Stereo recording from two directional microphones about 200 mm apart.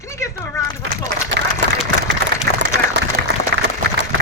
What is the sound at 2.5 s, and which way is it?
Applause, 30° left (ahead or behind).